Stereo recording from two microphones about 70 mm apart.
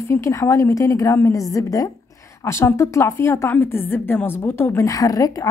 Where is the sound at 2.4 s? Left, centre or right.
Left.